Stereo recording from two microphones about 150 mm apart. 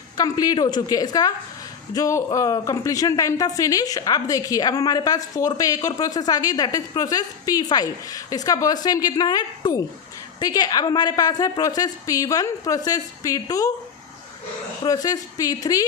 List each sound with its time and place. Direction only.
0.2 s speech: 25° left (ahead or behind)
14.8 s speech: 25° left (ahead or behind)